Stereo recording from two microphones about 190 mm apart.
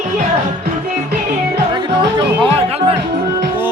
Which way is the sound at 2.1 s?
25° right (ahead or behind).